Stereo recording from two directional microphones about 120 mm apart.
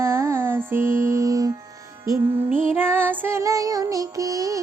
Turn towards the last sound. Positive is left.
turn(degrees=-30)  # may be behind; listen again after turning